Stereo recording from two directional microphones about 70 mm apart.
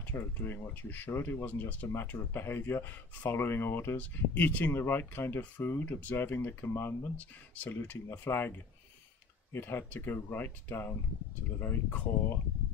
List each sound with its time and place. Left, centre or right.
0.0 s speech: left
7.2 s speech: left